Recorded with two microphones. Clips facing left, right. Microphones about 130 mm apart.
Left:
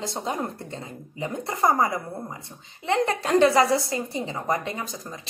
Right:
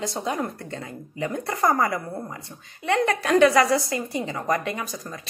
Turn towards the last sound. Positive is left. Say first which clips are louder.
# right 2 dB
turn(degrees=25)  # may be behind; listen again after turning